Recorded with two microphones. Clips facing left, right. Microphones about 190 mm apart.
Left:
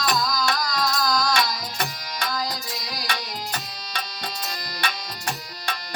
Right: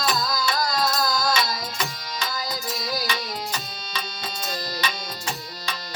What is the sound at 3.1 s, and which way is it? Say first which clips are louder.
Music: right 1 dB; 60° left (ahead or behind).